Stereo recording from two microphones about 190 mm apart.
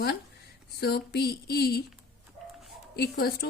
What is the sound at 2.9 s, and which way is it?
Speech, 55° left (ahead or behind).